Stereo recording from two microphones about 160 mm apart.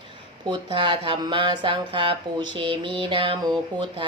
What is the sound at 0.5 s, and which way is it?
Speech, 30° right (ahead or behind).